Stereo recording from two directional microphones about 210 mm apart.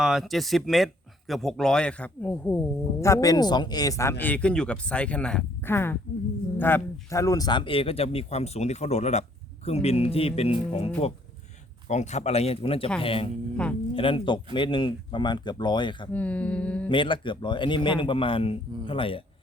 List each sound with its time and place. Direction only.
0.0 s a man's voice: centre (ahead or behind); by 16.0 s 20° left (ahead or behind)
16.1 s a man's voice: 5° left (ahead or behind)
16.9 s speech: 25° left (ahead or behind)